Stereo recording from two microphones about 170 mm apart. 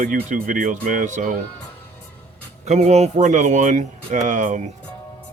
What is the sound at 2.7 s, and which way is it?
Speech, 40° right (ahead or behind).